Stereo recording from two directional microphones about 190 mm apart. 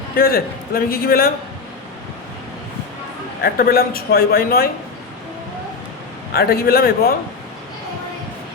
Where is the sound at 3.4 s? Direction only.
50° left (ahead or behind).